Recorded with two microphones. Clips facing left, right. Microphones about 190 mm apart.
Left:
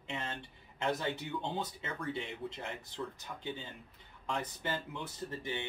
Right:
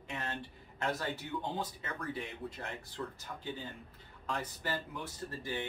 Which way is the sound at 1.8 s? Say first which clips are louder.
Left 1 dB; 25° left (ahead or behind).